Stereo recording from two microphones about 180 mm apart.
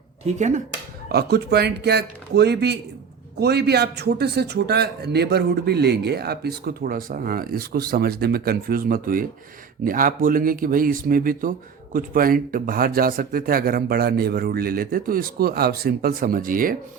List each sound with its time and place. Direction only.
0.3 s speech: 40° right (ahead or behind)
1.0 s a man's voice: 65° right (ahead or behind)